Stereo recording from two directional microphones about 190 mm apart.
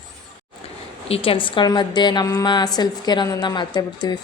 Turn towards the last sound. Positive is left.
turn(degrees=20)  # may be behind; listen again after turning